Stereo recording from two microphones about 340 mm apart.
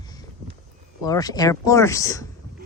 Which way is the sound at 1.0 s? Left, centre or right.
Centre.